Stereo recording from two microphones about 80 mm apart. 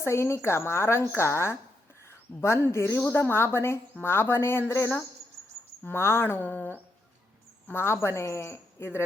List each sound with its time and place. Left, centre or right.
0.0 s a woman's voice: left
5.8 s a woman's voice: left